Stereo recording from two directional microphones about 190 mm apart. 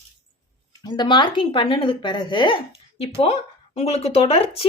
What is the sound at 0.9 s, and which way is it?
A woman's voice, 25° left (ahead or behind).